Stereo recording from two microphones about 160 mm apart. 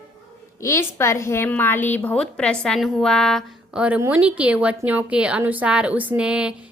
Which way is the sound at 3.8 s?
10° right (ahead or behind).